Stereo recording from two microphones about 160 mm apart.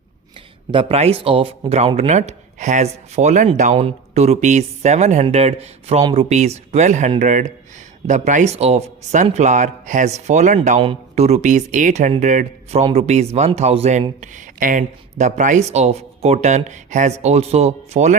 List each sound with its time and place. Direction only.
0.7 s speech: 35° right (ahead or behind)